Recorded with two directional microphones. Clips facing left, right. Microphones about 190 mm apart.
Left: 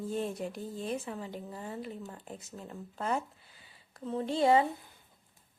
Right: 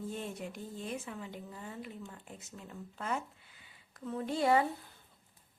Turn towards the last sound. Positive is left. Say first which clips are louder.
# left 3 dB
turn(degrees=25)  # may be behind; listen again after turning